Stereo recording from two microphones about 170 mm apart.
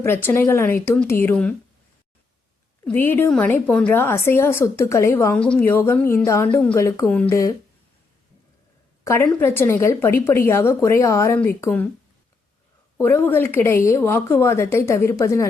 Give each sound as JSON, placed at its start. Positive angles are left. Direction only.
{"t": 0.0, "sound": "a woman's voice", "side_deg": 15}
{"t": 2.8, "sound": "a woman's voice", "side_deg": 10}
{"t": 9.0, "sound": "a woman's voice", "side_deg": 15}
{"t": 13.0, "sound": "a woman's voice", "side_deg": 10}